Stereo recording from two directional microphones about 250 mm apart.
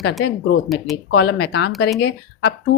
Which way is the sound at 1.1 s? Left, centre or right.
Left.